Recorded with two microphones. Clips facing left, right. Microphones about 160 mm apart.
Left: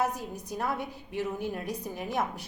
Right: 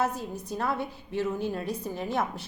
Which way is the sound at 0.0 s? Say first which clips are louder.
Right 1 dB; 15° left (ahead or behind).